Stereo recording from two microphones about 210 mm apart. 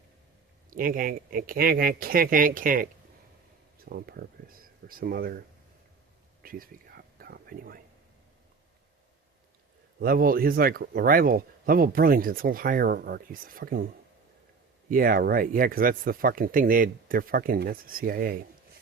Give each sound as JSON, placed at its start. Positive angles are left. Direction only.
{"t": 0.7, "sound": "speech", "side_deg": -40}
{"t": 4.0, "sound": "speech", "side_deg": -45}
{"t": 6.4, "sound": "a sound", "side_deg": -45}
{"t": 10.0, "sound": "speech", "side_deg": -45}
{"t": 14.8, "sound": "speech", "side_deg": -45}